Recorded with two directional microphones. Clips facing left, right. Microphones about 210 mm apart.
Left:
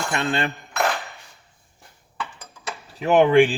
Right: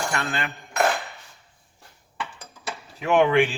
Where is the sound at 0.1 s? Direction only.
25° left (ahead or behind).